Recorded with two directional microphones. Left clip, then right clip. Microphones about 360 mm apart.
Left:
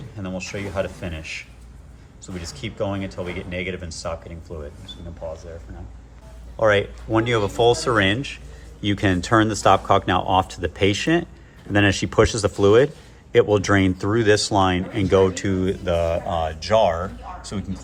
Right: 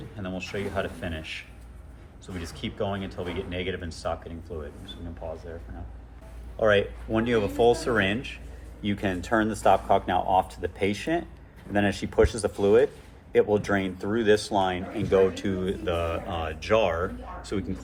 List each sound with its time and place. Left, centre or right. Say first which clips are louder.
0.2 s speech: left 3 dB; centre
6.6 s speech: left 4 dB; left